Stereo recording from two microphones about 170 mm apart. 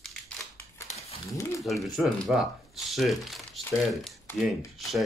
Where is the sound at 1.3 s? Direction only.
15° left (ahead or behind).